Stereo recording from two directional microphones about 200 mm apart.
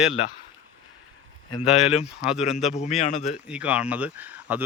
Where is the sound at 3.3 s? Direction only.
5° right (ahead or behind).